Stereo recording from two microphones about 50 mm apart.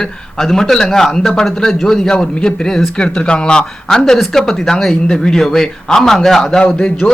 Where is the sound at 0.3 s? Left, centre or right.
Centre.